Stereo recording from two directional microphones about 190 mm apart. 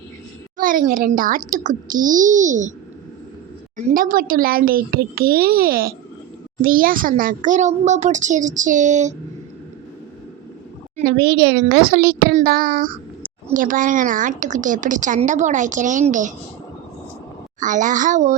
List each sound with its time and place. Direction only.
0.5 s a woman's voice: 45° right (ahead or behind)
3.8 s a woman's voice: 45° right (ahead or behind)
10.9 s a woman's voice: 50° right (ahead or behind)
17.6 s a woman's voice: 40° right (ahead or behind)